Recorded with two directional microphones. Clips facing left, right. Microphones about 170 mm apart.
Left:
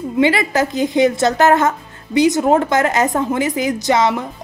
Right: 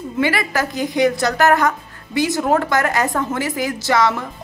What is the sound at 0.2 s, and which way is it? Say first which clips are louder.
A woman's voice: left 4 dB; 20° left (ahead or behind).